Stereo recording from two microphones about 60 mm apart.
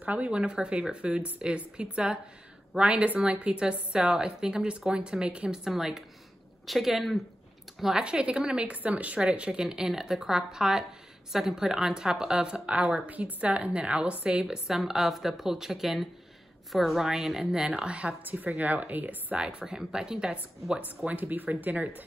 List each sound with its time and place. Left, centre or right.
0.0 s speech: right; by 7.2 s centre
7.8 s speech: centre
18.2 s speech: right
19.3 s speech: centre
21.0 s speech: right